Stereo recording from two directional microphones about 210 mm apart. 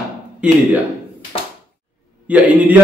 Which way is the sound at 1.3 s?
25° left (ahead or behind).